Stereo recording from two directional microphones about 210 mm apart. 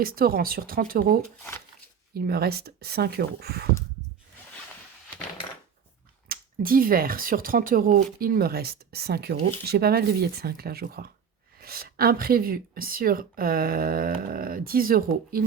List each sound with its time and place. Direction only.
0.0 s speech: 45° right (ahead or behind)
6.2 s speech: 45° right (ahead or behind)